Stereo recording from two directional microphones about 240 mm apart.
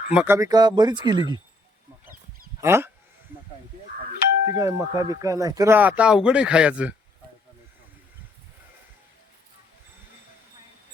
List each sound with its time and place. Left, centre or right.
0.1 s speech: centre
2.6 s speech: centre
4.5 s speech: centre